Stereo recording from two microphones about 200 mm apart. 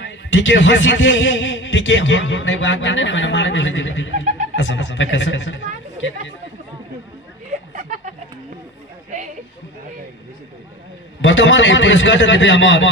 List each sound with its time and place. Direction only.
0.0 s a man's voice: 65° left (ahead or behind)
7.7 s a sound: 40° right (ahead or behind)
11.1 s a man's voice: 70° left (ahead or behind)